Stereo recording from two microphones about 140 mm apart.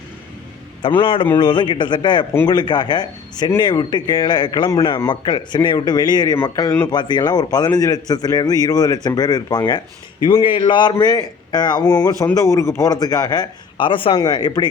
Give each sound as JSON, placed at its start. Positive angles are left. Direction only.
{"t": 1.0, "sound": "speech", "side_deg": 35}
{"t": 6.4, "sound": "a man's voice", "side_deg": 20}